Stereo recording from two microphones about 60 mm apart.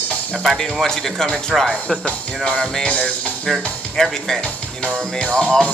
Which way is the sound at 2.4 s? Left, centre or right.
Centre.